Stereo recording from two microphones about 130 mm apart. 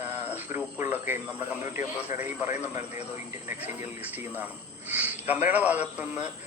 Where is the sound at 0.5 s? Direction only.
15° right (ahead or behind).